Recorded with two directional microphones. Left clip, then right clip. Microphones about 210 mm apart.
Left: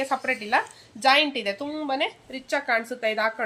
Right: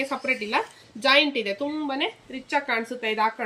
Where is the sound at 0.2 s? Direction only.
35° left (ahead or behind).